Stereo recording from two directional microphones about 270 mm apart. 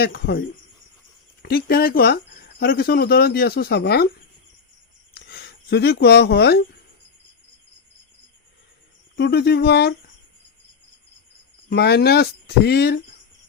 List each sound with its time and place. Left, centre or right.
0.0 s speech: left
5.1 s speech: left
9.1 s speech: left
11.7 s speech: left